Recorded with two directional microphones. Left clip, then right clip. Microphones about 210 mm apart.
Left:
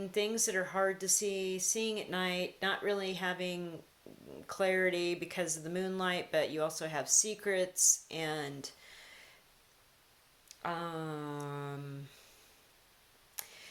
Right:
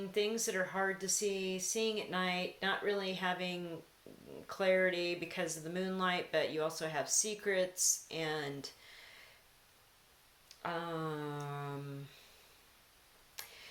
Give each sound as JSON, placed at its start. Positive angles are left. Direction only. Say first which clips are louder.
{"t": 0.1, "sound": "speech", "louder": "left 2 dB", "side_deg": 45}
{"t": 10.5, "sound": "speech", "louder": "left 1 dB", "side_deg": 40}
{"t": 13.3, "sound": "tick", "louder": "left 1 dB", "side_deg": 45}